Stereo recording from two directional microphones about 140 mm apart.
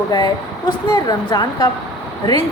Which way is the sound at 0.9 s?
30° left (ahead or behind).